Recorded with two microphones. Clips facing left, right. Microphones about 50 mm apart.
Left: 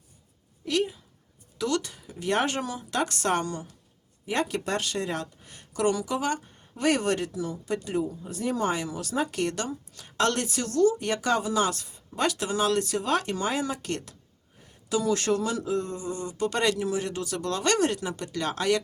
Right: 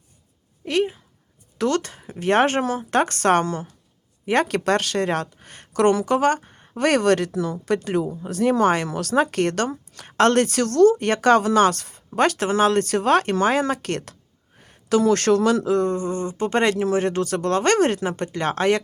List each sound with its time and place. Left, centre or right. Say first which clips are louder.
0.6 s speech: right 5 dB; right
1.5 s speech: right 6 dB; right
4.3 s speech: right 8 dB; right